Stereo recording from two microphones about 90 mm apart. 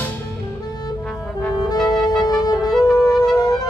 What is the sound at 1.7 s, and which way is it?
Music, 45° left (ahead or behind).